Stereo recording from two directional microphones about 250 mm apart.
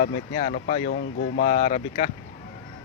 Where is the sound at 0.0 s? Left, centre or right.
Left.